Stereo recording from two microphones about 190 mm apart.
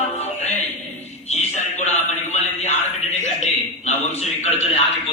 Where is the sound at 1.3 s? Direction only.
35° left (ahead or behind).